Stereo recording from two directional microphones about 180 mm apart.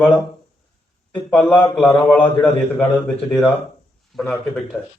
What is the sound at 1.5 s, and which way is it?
Speech, 10° left (ahead or behind).